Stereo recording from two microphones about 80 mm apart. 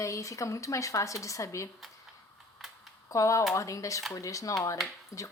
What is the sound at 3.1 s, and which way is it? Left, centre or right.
A woman's voice, left.